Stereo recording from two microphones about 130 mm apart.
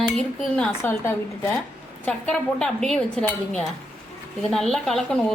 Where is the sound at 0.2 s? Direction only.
5° left (ahead or behind).